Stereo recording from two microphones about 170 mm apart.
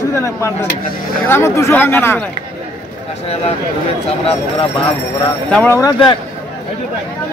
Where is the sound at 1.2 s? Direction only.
15° left (ahead or behind).